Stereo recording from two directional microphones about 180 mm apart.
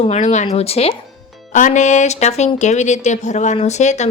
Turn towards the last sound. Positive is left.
turn(degrees=40)  # may be behind; listen again after turning